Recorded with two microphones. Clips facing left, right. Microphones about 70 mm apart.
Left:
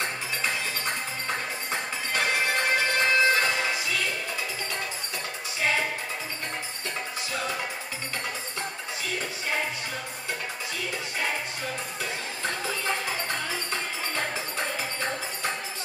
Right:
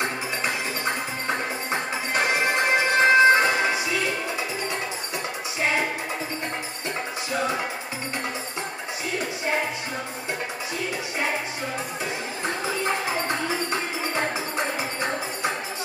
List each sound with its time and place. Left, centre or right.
1.2 s music: right
12.8 s music: right